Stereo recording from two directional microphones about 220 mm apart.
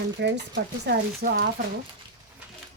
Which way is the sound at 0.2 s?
50° right (ahead or behind).